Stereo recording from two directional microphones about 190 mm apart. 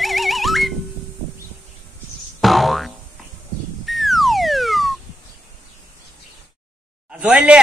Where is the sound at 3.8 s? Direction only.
Centre (ahead or behind).